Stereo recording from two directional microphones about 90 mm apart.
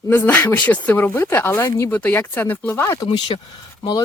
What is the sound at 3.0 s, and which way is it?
Speech, 60° left (ahead or behind).